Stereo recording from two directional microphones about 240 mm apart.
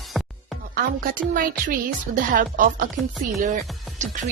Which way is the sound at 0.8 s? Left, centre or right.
Right.